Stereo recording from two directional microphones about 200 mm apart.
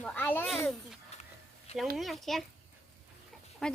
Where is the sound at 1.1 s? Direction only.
30° left (ahead or behind).